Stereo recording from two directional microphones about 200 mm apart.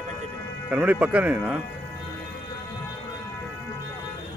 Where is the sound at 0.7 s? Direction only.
5° right (ahead or behind).